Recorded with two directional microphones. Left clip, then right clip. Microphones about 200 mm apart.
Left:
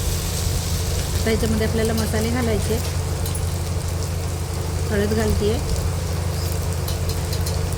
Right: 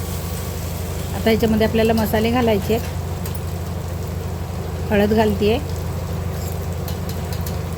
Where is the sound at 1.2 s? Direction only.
5° right (ahead or behind).